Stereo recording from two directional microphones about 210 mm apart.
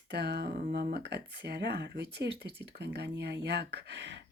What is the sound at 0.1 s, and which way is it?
Speech, 55° right (ahead or behind).